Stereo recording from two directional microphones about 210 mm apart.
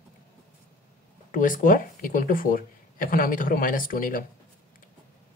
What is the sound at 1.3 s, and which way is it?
Speech, 40° left (ahead or behind).